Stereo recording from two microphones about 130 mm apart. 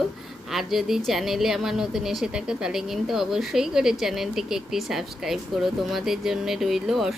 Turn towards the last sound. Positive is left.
turn(degrees=-5)  # may be behind; listen again after turning